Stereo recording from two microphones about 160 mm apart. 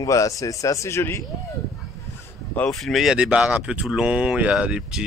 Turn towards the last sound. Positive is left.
turn(degrees=-5)  # may be behind; listen again after turning